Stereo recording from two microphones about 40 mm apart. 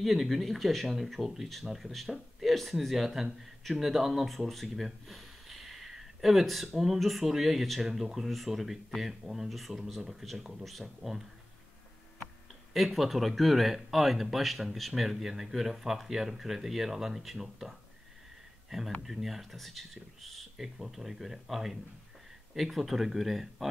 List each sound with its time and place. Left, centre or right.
0.0 s speech: centre
12.7 s speech: centre